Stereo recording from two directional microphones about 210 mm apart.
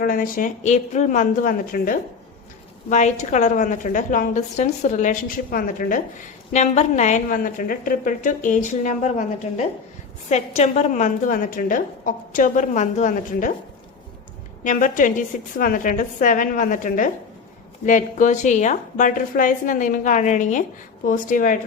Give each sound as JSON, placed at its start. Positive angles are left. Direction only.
{"t": 0.0, "sound": "a woman's voice", "side_deg": 45}
{"t": 14.6, "sound": "a woman's voice", "side_deg": 40}